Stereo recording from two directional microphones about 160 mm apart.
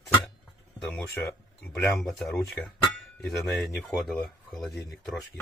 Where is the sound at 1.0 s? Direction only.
15° left (ahead or behind).